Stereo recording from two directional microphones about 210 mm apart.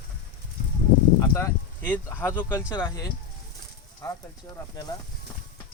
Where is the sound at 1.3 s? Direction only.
10° left (ahead or behind).